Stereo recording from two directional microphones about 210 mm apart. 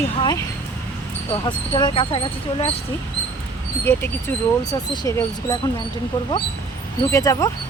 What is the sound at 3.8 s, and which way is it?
Speech, 10° left (ahead or behind).